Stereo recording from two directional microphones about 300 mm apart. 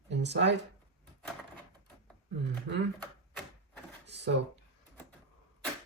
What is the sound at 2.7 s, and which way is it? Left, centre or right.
Speech, right.